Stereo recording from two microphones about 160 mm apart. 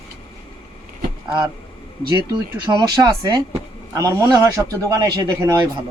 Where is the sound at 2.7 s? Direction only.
25° right (ahead or behind).